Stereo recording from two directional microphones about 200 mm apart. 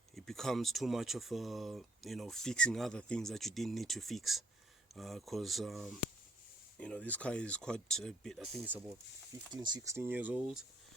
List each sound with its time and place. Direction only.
0.3 s speech: centre (ahead or behind)
9.3 s speech: 20° right (ahead or behind)